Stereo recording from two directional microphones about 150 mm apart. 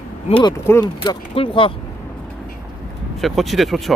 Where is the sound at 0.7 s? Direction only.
25° left (ahead or behind).